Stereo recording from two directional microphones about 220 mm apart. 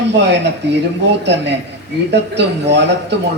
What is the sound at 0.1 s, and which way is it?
A woman's voice, 50° right (ahead or behind).